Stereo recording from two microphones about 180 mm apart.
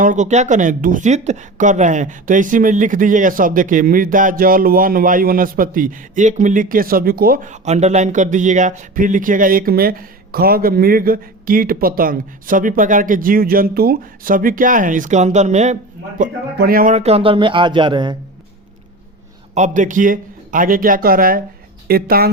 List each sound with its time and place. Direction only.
0.0 s speech: 45° right (ahead or behind); by 18.2 s 25° right (ahead or behind)
19.5 s speech: 40° right (ahead or behind); by 22.3 s 55° right (ahead or behind)